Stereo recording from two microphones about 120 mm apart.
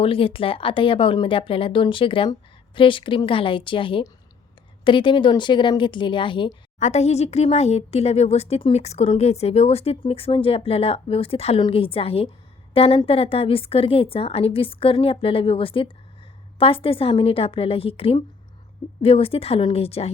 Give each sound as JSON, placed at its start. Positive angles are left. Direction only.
{"t": 0.0, "sound": "a woman's voice", "side_deg": 50}
{"t": 6.7, "sound": "a woman's voice", "side_deg": 70}